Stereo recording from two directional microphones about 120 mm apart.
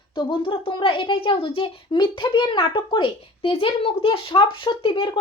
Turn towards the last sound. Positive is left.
turn(degrees=45)  # may be behind; listen again after turning